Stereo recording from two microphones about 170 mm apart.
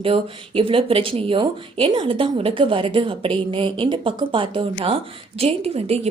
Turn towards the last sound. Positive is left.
turn(degrees=-35)  # may be behind; listen again after turning